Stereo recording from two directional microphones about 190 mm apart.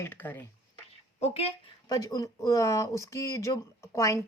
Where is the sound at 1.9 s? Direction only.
20° left (ahead or behind).